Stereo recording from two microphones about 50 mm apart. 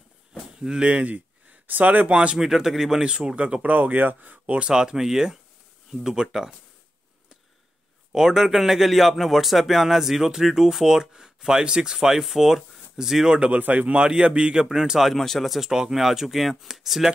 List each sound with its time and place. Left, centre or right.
0.3 s a sound: centre
0.8 s speech: right
2.3 s speech: centre; by 4.6 s right
4.6 s speech: centre
8.1 s speech: centre
13.5 s a man's voice: right; by 15.1 s centre
15.1 s speech: centre